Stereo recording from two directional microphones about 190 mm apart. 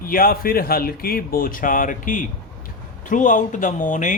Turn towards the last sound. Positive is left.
turn(degrees=40)  # may be behind; listen again after turning